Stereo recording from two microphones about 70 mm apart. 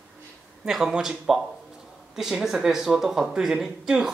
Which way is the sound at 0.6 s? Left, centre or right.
Centre.